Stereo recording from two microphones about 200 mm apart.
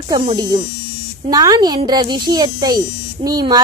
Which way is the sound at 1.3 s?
20° right (ahead or behind).